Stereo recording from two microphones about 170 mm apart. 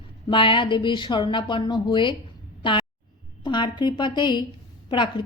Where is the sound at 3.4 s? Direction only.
25° left (ahead or behind).